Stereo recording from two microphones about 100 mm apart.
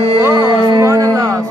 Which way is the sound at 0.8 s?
30° right (ahead or behind).